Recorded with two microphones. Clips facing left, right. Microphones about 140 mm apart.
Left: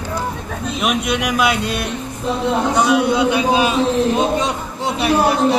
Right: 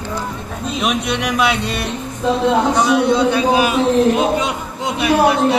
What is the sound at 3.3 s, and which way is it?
Speech, 20° left (ahead or behind).